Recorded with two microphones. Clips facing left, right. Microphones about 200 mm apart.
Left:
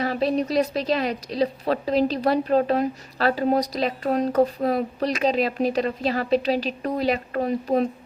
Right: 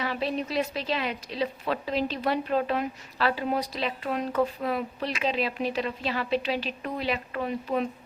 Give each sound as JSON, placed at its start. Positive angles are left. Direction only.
{"t": 0.0, "sound": "a woman's voice", "side_deg": 40}